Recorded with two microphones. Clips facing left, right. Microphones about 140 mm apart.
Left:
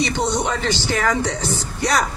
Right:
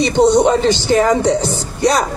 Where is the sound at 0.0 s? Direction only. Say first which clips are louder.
Right 10 dB; 25° right (ahead or behind).